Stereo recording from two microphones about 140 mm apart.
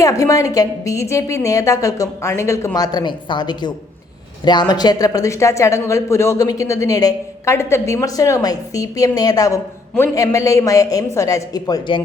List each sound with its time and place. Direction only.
0.0 s speech: 25° left (ahead or behind)